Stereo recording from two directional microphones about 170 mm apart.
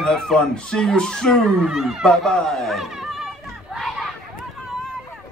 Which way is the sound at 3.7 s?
Centre (ahead or behind).